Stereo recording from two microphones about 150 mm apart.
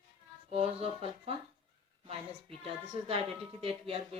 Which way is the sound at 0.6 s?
40° right (ahead or behind).